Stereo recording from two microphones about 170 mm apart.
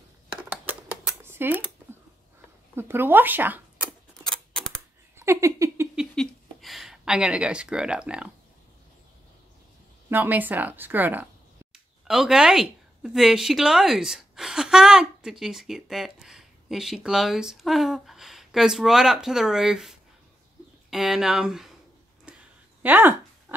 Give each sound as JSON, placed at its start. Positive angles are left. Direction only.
{"t": 0.5, "sound": "typewriter", "side_deg": -10}
{"t": 2.7, "sound": "speech", "side_deg": -15}
{"t": 5.1, "sound": "speech", "side_deg": -15}
{"t": 5.9, "sound": "a sound", "side_deg": 0}
{"t": 10.0, "sound": "speech", "side_deg": -10}
{"t": 22.3, "sound": "a sound", "side_deg": -5}
{"t": 22.8, "sound": "speech", "side_deg": -10}